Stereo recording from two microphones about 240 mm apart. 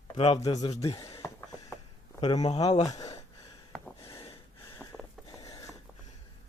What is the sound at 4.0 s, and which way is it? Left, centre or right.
Gasp, left.